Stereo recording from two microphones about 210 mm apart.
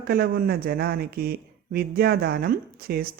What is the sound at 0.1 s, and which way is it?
Speech, 50° right (ahead or behind).